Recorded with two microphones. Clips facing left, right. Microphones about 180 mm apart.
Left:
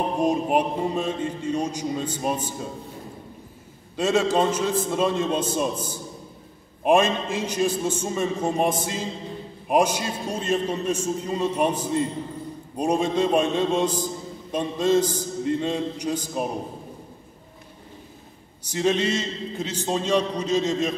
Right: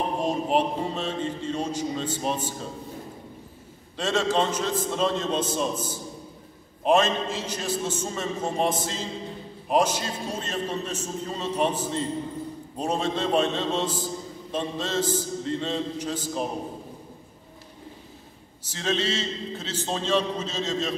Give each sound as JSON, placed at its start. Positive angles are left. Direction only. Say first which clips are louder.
{"t": 0.2, "sound": "a man's voice", "louder": "left 3 dB", "side_deg": 10}
{"t": 3.9, "sound": "a man's voice", "louder": "left 3 dB", "side_deg": 10}
{"t": 18.6, "sound": "a man's voice", "louder": "left 5 dB", "side_deg": 15}